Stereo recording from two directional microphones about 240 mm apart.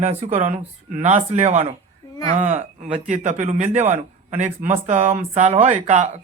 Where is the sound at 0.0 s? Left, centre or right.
Right.